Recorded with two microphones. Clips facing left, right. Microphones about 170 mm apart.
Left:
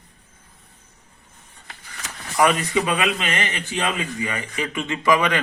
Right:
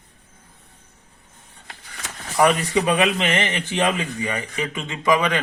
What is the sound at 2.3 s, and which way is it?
Speech, 30° right (ahead or behind).